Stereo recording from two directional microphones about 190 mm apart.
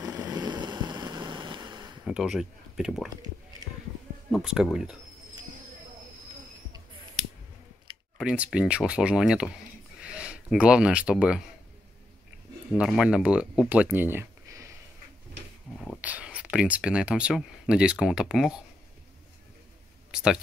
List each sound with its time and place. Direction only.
0.0 s vehicle: 20° right (ahead or behind)
2.0 s speech: centre (ahead or behind)
4.3 s speech: centre (ahead or behind)
8.2 s speech: 5° right (ahead or behind)
12.7 s speech: 5° right (ahead or behind)
16.0 s speech: 5° right (ahead or behind)
20.1 s a sound: 5° right (ahead or behind)